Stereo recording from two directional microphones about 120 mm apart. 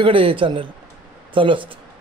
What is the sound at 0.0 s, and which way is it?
Speech, 45° right (ahead or behind).